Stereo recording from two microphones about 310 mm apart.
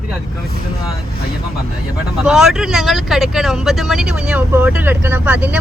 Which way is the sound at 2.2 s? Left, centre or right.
Centre.